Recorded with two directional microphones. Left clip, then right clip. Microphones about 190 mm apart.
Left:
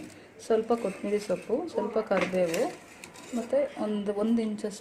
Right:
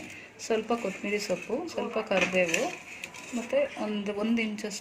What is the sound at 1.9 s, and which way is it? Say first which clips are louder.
Speech: right 2 dB; centre (ahead or behind).